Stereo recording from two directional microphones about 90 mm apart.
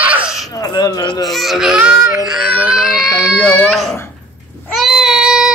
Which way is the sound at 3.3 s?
15° left (ahead or behind).